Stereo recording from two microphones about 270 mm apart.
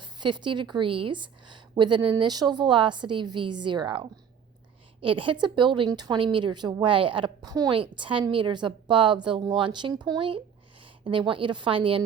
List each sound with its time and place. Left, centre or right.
0.0 s a woman's voice: centre